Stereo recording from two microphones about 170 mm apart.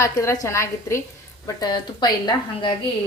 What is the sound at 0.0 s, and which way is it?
A woman's voice, 20° left (ahead or behind).